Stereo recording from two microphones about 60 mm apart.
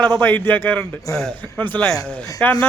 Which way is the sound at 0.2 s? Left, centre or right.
Left.